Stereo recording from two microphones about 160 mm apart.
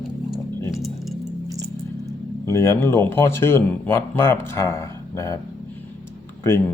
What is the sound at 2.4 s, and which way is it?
Speech, 15° left (ahead or behind).